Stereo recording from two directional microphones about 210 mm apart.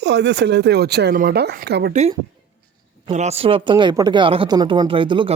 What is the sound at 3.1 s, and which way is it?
Speech, 30° right (ahead or behind).